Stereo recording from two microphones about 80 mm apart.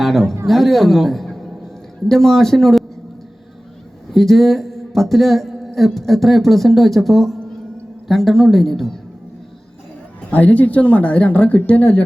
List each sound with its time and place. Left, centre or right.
0.0 s a man's voice: centre
4.1 s speech: centre
10.2 s a woman's voice: centre